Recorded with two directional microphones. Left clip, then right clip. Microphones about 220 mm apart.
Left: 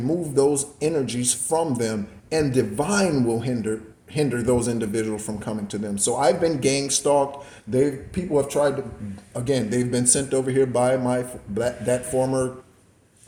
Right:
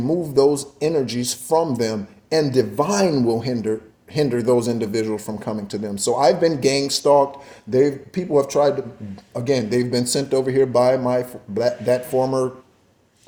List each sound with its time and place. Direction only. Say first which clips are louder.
0.0 s speech: right 4 dB; 35° right (ahead or behind)